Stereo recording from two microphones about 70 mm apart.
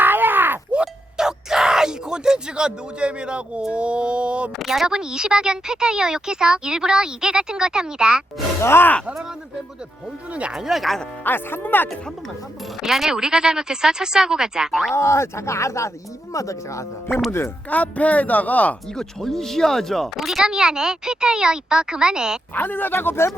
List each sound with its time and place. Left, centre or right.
0.0 s a sound: right
0.8 s music: centre
3.7 s speech: centre
4.5 s speech: centre
8.6 s speech: left
10.3 s speech: centre
11.2 s speech: left
12.8 s speech: centre
14.9 s speech: left
17.1 s speech: centre
17.7 s speech: left
18.9 s speech: centre
22.5 s speech: left